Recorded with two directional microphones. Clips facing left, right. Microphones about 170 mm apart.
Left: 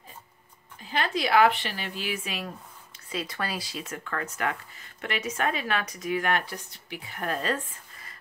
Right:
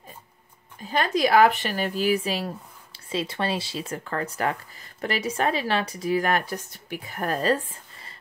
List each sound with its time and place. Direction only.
0.8 s speech: 45° right (ahead or behind)